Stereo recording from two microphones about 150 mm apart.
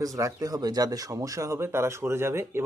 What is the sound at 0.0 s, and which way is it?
Speech, 20° right (ahead or behind).